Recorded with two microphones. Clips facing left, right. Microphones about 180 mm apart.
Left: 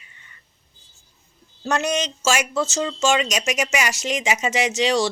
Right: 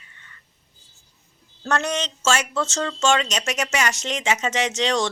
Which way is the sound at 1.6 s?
15° left (ahead or behind).